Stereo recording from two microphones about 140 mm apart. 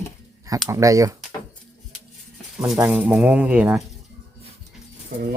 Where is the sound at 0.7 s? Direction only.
20° right (ahead or behind).